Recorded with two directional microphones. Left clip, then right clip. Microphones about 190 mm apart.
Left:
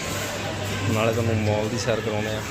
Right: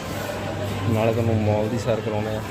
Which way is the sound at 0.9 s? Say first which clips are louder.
Right 2 dB; 5° right (ahead or behind).